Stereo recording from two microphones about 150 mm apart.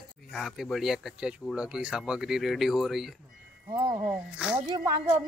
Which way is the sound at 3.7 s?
30° right (ahead or behind).